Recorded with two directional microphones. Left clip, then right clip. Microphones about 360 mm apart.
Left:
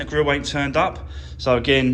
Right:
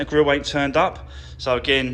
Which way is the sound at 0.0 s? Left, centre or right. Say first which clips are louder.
Right 2 dB; centre.